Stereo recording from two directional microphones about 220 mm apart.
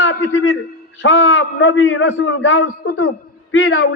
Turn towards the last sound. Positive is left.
turn(degrees=65)  # may be behind; listen again after turning